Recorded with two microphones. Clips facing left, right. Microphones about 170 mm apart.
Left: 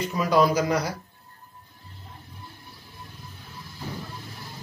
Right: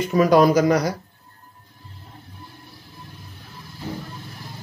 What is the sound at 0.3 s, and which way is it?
Speech, 55° right (ahead or behind).